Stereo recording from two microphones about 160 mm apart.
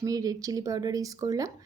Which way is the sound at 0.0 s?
20° right (ahead or behind).